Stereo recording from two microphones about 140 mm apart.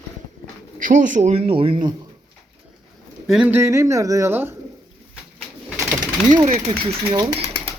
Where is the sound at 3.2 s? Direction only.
5° right (ahead or behind).